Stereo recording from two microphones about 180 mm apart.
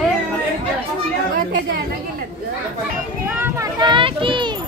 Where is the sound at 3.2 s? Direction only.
10° right (ahead or behind); by 4.5 s 25° right (ahead or behind).